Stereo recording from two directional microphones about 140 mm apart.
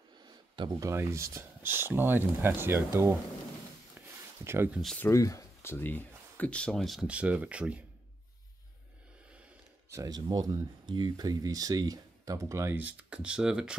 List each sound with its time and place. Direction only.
0.6 s speech: 25° right (ahead or behind)
4.1 s a sound: 15° right (ahead or behind)
4.9 s speech: 20° left (ahead or behind); by 7.8 s 10° right (ahead or behind)
9.8 s speech: 25° right (ahead or behind); by 13.7 s 5° right (ahead or behind)